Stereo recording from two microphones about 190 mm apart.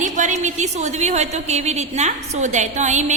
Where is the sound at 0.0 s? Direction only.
40° right (ahead or behind).